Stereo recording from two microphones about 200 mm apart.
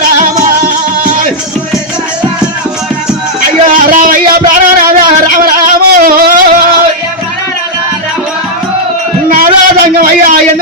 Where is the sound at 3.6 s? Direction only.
40° right (ahead or behind).